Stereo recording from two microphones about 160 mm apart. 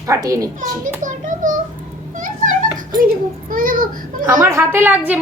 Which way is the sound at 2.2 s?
55° right (ahead or behind).